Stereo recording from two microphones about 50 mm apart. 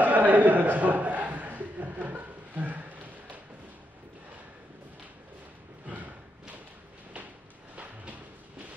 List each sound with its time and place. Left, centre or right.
0.0 s chuckle: right
5.9 s thump: right
7.7 s a sound: right